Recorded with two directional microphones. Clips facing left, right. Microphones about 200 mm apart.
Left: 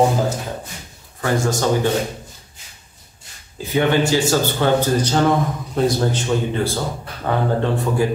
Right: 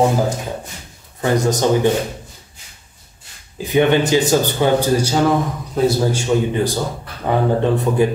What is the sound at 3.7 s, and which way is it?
A man's voice, 20° right (ahead or behind).